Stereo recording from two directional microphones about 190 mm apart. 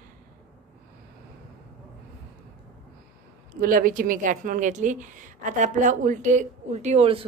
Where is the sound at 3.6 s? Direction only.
45° right (ahead or behind).